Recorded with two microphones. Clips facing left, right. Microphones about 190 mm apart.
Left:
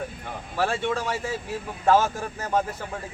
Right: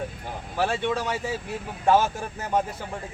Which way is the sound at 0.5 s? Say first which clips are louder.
Even; 15° right (ahead or behind).